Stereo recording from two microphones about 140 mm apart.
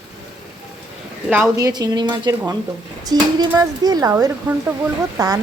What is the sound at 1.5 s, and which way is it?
Speech, 25° right (ahead or behind).